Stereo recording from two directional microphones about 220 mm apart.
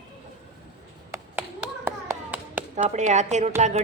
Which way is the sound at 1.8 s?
10° right (ahead or behind).